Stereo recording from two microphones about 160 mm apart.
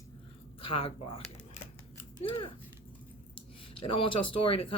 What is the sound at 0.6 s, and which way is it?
Speech, 35° left (ahead or behind).